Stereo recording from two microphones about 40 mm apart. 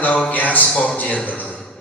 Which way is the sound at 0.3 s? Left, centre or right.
Left.